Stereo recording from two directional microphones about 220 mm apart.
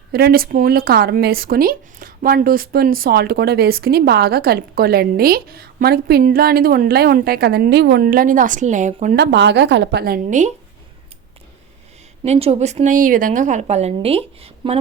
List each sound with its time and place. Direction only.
0.1 s speech: 45° right (ahead or behind)
9.1 s speech: 50° right (ahead or behind); by 10.5 s 35° right (ahead or behind)
12.2 s a woman's voice: 30° right (ahead or behind)